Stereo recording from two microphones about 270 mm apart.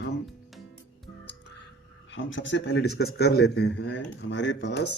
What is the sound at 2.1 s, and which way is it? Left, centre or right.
Speech, left.